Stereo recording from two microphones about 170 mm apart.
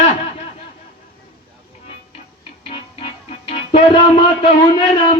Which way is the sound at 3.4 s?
35° left (ahead or behind).